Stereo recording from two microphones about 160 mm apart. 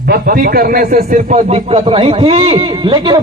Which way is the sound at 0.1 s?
65° right (ahead or behind).